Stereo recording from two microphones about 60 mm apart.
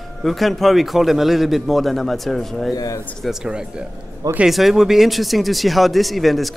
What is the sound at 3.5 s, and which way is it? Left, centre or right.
Speech, centre.